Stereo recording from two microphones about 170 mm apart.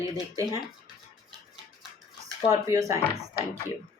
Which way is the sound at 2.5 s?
20° right (ahead or behind).